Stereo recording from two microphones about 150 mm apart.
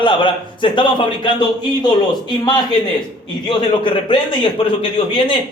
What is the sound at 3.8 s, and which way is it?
A man's voice, 35° left (ahead or behind).